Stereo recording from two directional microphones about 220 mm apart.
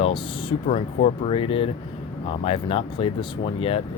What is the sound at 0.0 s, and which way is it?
Speech, 25° left (ahead or behind).